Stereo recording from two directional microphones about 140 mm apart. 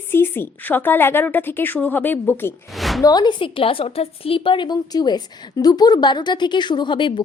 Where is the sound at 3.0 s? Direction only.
30° left (ahead or behind).